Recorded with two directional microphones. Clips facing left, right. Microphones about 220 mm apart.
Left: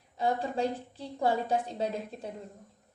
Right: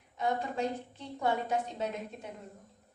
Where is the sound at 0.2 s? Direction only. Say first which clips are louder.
Left 3 dB; 35° left (ahead or behind).